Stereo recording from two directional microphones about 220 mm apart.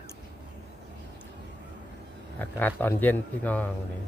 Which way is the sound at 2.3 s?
10° left (ahead or behind).